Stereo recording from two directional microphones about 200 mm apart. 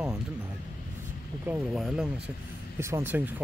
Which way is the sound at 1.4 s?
5° right (ahead or behind).